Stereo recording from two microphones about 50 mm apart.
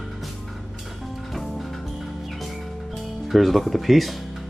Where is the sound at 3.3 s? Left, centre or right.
Centre.